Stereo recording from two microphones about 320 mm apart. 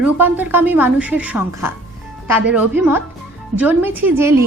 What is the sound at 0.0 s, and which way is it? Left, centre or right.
A woman's voice, centre.